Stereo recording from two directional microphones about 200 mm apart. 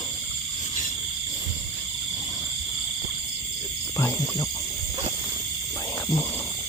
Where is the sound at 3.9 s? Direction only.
15° left (ahead or behind).